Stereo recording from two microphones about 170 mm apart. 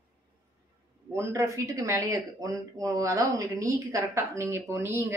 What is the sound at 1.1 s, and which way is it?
Speech, 15° right (ahead or behind).